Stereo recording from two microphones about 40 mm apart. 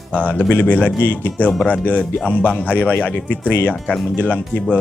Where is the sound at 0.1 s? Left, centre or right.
Left.